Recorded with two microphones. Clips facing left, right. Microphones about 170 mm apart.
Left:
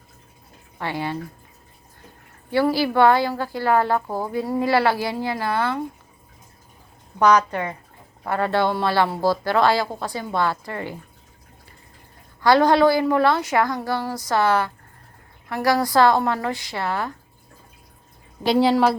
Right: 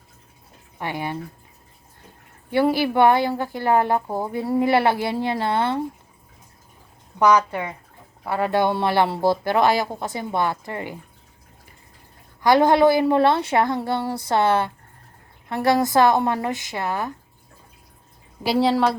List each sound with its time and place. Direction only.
0.8 s speech: 15° right (ahead or behind)
2.5 s speech: 20° right (ahead or behind)
7.2 s speech: 10° right (ahead or behind)
12.4 s speech: 20° right (ahead or behind)
18.4 s speech: 5° right (ahead or behind)